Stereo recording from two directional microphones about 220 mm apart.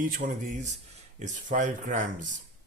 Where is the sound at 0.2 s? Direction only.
35° right (ahead or behind).